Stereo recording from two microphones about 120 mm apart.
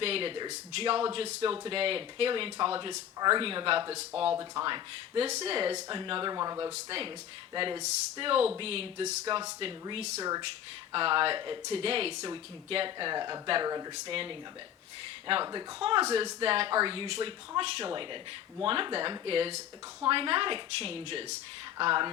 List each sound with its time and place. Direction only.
0.0 s speech: 50° right (ahead or behind)
5.3 s speech: 55° right (ahead or behind)
9.9 s speech: 60° right (ahead or behind)
10.2 s speech: 30° right (ahead or behind)
10.9 s speech: 45° right (ahead or behind)
13.9 s speech: 50° right (ahead or behind)
15.8 s speech: 45° right (ahead or behind)